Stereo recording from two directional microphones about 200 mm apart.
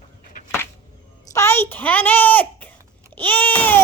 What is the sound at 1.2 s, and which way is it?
Goat, 15° left (ahead or behind).